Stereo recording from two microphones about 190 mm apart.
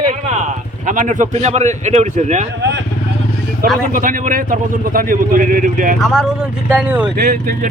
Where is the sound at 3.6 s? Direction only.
50° right (ahead or behind).